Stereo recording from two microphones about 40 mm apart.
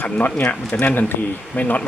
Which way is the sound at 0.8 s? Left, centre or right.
Left.